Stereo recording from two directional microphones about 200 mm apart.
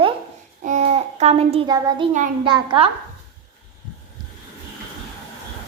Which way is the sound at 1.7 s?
20° right (ahead or behind).